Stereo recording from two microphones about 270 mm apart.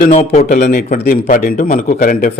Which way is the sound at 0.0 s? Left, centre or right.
Left.